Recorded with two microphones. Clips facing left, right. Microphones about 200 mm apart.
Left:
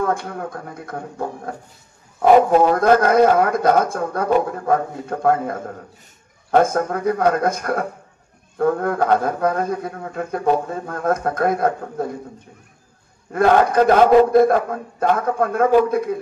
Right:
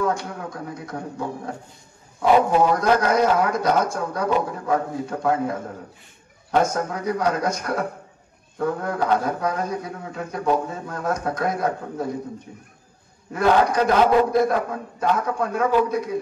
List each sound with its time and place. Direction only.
0.0 s speech: 55° left (ahead or behind)
2.6 s speech: 55° left (ahead or behind)
13.3 s speech: 55° left (ahead or behind)